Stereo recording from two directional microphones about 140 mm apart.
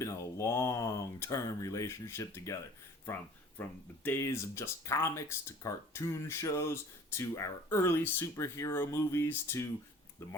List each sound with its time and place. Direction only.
0.0 s speech: 20° left (ahead or behind)
3.6 s speech: 15° left (ahead or behind)